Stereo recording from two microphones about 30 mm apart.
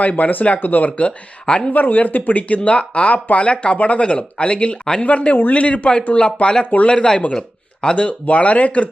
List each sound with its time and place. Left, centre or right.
0.2 s speech: left
1.5 s speech: left
1.7 s speech: left
2.6 s speech: left
6.1 s speech: left
7.3 s a sound: left
7.9 s speech: left